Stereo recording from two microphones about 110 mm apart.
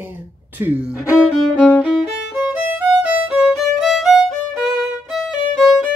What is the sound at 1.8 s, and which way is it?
Violin, 10° right (ahead or behind).